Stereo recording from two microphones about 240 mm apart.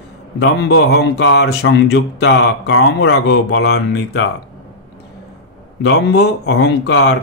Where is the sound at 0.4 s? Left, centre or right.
Left.